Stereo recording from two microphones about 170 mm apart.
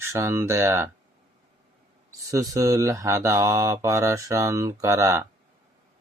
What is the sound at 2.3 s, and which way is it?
Speech, 20° right (ahead or behind).